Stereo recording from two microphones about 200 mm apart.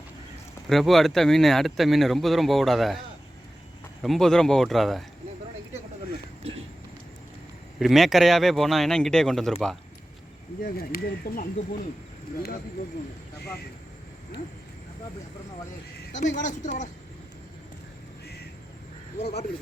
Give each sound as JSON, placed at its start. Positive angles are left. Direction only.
{"t": 0.7, "sound": "speech", "side_deg": 0}
{"t": 4.0, "sound": "speech", "side_deg": 0}
{"t": 7.8, "sound": "speech", "side_deg": 0}
{"t": 10.6, "sound": "speech", "side_deg": 45}
{"t": 16.1, "sound": "a woman's voice", "side_deg": 35}